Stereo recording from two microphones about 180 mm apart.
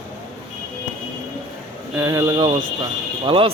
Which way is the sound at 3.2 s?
30° right (ahead or behind).